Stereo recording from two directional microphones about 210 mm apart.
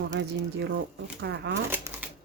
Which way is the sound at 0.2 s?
55° right (ahead or behind).